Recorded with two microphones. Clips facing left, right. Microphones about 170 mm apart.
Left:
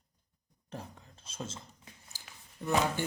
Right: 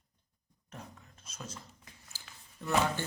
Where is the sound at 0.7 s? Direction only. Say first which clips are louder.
Left 4 dB; 30° left (ahead or behind).